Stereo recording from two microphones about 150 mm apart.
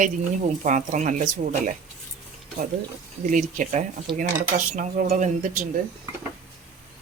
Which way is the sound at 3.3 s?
60° right (ahead or behind).